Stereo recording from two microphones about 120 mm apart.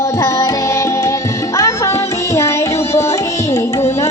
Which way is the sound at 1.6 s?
25° left (ahead or behind).